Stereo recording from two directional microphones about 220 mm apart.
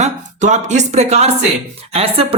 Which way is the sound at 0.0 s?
30° right (ahead or behind).